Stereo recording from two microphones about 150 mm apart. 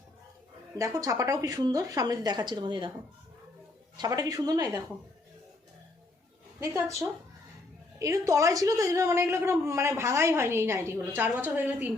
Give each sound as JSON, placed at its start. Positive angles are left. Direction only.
{"t": 0.8, "sound": "a woman's voice", "side_deg": -20}
{"t": 3.9, "sound": "a woman's voice", "side_deg": -25}
{"t": 6.6, "sound": "a woman's voice", "side_deg": -20}
{"t": 7.9, "sound": "a woman's voice", "side_deg": -20}